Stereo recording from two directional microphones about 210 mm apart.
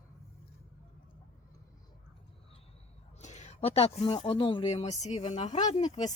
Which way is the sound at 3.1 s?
35° left (ahead or behind).